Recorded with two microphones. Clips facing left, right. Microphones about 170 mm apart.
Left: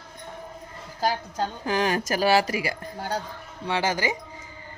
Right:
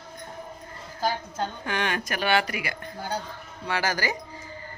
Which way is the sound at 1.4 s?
35° left (ahead or behind).